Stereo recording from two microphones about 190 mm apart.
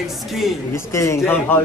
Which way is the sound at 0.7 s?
15° left (ahead or behind).